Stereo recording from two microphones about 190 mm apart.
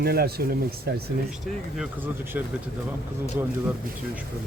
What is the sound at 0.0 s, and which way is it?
Speech, 55° right (ahead or behind).